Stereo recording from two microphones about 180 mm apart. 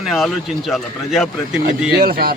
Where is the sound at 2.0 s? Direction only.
60° right (ahead or behind).